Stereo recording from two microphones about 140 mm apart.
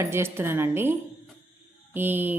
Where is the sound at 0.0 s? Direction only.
15° right (ahead or behind).